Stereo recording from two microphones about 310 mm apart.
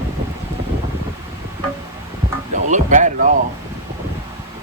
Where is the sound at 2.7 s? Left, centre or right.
Right.